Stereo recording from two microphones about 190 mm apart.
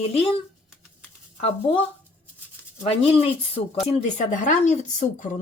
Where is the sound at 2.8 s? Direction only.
30° left (ahead or behind).